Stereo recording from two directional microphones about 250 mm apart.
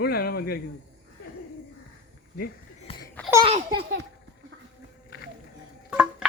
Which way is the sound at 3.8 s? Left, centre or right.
Right.